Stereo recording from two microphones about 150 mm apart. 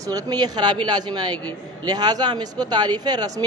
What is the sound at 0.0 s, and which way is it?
Speech, 25° right (ahead or behind).